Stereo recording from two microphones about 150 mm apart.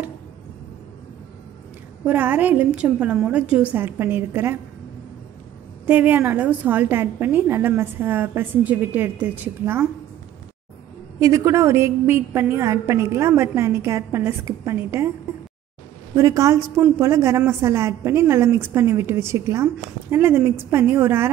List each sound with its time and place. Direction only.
2.0 s a woman's voice: 10° right (ahead or behind)
5.9 s a woman's voice: 10° right (ahead or behind)
11.1 s a woman's voice: 20° right (ahead or behind)
16.2 s a woman's voice: 20° right (ahead or behind)